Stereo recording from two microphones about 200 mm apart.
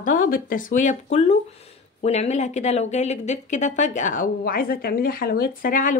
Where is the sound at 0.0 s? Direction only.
40° left (ahead or behind).